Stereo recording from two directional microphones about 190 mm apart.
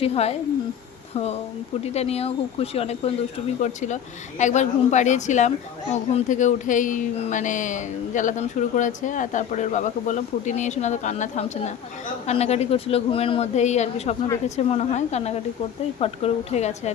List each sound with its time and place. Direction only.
0.0 s a woman's voice: 35° left (ahead or behind)